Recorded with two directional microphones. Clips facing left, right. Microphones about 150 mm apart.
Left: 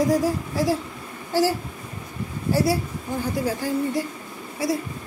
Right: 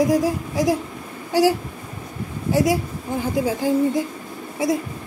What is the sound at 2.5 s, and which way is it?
A woman's voice, 15° right (ahead or behind).